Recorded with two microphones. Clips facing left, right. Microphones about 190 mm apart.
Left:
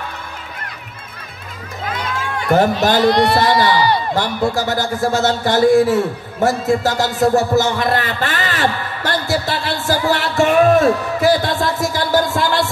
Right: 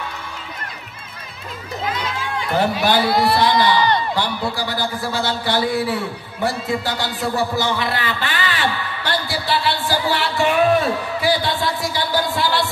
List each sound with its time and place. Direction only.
1.9 s run: 50° left (ahead or behind)
3.0 s speech: 5° right (ahead or behind)
3.3 s a man's voice: 45° left (ahead or behind)